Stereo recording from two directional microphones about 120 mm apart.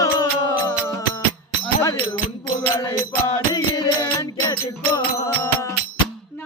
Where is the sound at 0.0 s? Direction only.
30° left (ahead or behind).